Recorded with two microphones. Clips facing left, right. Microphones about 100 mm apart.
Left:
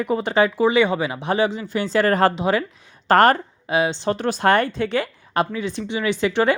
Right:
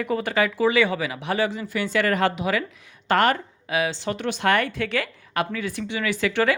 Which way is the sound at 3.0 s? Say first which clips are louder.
Left 5 dB; 40° left (ahead or behind).